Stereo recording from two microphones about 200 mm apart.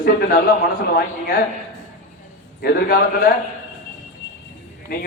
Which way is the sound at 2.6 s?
50° left (ahead or behind).